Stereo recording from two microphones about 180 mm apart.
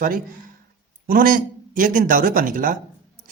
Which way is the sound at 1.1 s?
50° right (ahead or behind).